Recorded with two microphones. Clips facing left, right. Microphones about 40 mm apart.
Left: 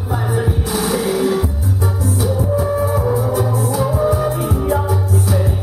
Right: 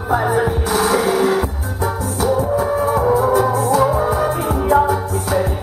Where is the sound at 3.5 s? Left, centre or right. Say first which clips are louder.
Right 4 dB; right.